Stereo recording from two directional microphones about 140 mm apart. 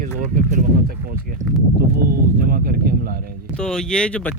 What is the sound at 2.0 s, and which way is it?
Speech, 90° right.